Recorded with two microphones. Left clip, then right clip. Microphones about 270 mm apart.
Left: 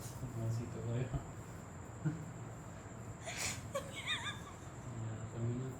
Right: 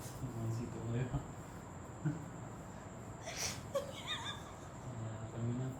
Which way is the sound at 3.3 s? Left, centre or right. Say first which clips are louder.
Right 2 dB; centre.